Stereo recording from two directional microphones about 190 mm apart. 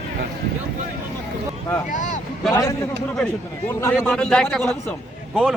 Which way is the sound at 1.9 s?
40° left (ahead or behind).